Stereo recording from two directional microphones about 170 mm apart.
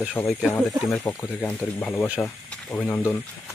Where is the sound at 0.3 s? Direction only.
Centre (ahead or behind).